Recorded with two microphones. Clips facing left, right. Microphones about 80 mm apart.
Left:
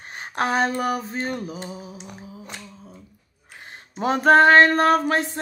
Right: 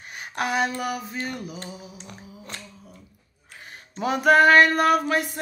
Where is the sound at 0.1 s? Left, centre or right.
Left.